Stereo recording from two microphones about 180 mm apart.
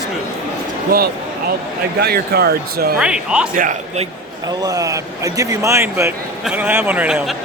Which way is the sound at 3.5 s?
45° right (ahead or behind).